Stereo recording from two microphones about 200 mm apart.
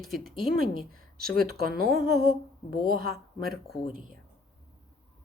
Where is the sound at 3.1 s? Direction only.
Centre (ahead or behind).